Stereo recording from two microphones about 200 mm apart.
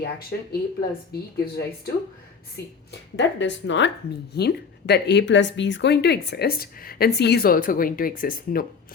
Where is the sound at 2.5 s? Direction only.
60° left (ahead or behind).